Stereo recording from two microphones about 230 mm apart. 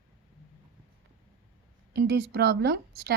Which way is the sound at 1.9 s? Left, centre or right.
Right.